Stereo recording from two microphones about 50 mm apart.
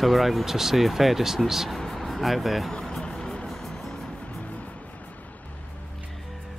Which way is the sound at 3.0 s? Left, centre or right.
Centre.